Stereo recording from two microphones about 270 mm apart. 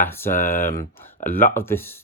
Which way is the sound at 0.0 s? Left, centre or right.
Centre.